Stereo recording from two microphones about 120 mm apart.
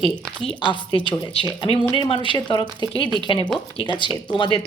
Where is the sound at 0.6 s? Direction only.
45° left (ahead or behind).